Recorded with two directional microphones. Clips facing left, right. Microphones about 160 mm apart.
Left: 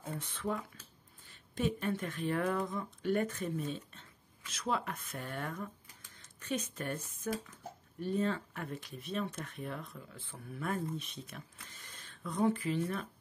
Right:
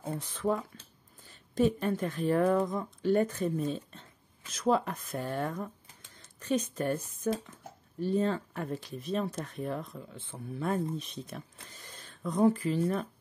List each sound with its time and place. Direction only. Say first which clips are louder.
0.0 s speech: right 6 dB; 35° right (ahead or behind)
10.0 s speech: right 6 dB; 25° right (ahead or behind)